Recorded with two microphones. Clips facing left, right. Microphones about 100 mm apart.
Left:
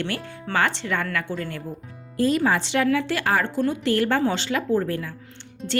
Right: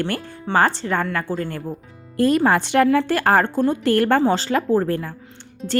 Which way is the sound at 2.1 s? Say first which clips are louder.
Right 4 dB; 55° right (ahead or behind).